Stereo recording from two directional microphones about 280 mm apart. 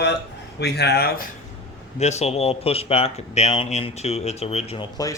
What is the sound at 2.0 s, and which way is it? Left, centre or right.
Speech, left.